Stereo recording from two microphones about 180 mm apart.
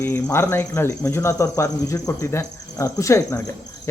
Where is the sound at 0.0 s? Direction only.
15° left (ahead or behind).